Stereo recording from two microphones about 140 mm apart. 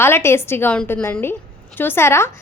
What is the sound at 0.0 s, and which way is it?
A woman's voice, 15° left (ahead or behind).